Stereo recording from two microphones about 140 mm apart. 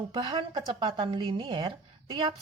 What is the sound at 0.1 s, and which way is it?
Speech, 35° right (ahead or behind).